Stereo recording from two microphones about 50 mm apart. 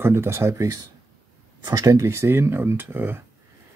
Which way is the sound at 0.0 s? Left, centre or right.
Right.